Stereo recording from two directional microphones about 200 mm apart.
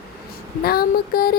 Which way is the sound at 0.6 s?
50° left (ahead or behind).